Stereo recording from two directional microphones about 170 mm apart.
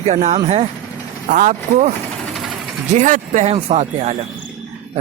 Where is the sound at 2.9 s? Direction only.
50° right (ahead or behind).